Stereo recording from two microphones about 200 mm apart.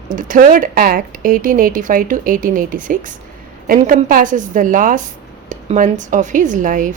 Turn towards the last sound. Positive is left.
turn(degrees=-40)  # may be behind; listen again after turning